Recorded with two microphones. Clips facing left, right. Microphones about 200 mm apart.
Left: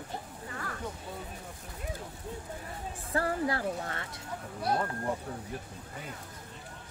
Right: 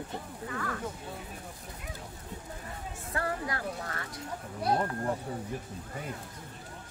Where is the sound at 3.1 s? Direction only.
30° left (ahead or behind).